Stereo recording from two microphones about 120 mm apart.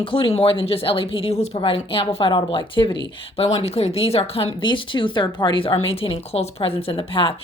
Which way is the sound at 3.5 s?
60° left (ahead or behind).